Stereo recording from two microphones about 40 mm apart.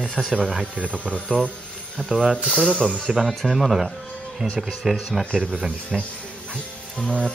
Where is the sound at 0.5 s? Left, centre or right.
Right.